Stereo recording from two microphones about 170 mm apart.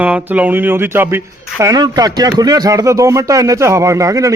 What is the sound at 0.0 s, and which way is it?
Speech, 10° right (ahead or behind).